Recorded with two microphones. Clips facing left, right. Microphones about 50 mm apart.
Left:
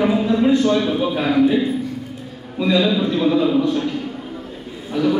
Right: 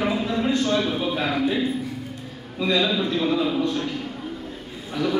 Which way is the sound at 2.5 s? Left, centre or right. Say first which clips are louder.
Left 5 dB; centre.